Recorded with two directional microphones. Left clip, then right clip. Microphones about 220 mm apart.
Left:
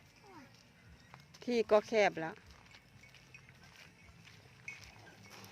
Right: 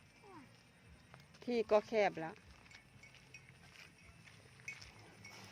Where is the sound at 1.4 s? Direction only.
5° left (ahead or behind).